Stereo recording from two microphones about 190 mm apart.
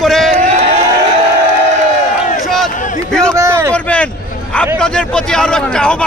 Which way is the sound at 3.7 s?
5° left (ahead or behind).